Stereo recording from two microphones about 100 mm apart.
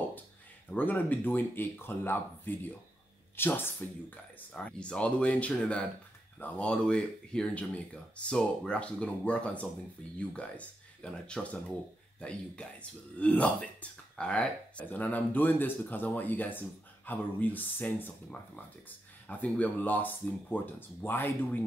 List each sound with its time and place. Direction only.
0.7 s speech: 20° left (ahead or behind)